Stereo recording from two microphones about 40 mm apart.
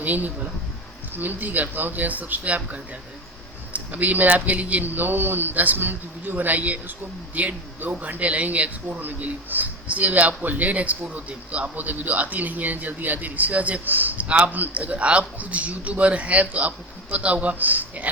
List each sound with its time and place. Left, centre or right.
0.0 s a man's voice: right
9.0 s a man's voice: right
14.3 s a man's voice: right